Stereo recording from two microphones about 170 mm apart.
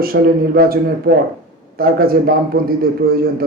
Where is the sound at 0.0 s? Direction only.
60° right (ahead or behind).